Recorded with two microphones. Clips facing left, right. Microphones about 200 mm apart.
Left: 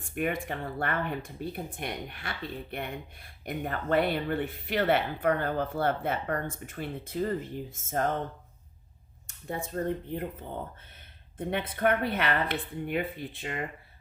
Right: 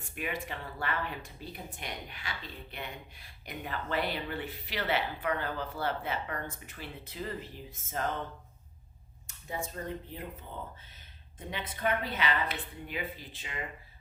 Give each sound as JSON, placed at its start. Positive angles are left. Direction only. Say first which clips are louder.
{"t": 0.0, "sound": "speech", "louder": "left 7 dB", "side_deg": 50}
{"t": 9.2, "sound": "speech", "louder": "left 3 dB", "side_deg": 55}